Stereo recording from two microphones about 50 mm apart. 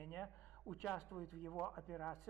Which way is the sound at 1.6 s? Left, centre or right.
Centre.